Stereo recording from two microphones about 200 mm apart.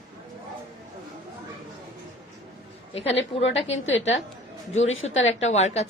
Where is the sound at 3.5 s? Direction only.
30° left (ahead or behind).